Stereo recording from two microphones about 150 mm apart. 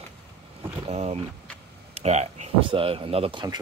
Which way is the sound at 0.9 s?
45° right (ahead or behind).